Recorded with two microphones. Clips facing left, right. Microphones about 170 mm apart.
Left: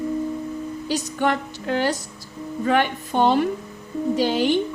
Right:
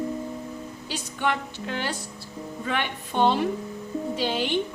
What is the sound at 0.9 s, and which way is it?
Music, 45° left (ahead or behind).